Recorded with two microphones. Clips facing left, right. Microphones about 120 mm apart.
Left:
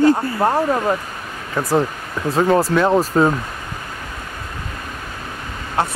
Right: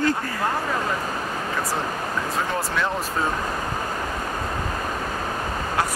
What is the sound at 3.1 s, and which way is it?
Speech, 55° left (ahead or behind).